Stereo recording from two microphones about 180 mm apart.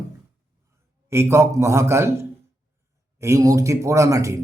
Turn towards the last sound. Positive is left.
turn(degrees=-15)  # may be behind; listen again after turning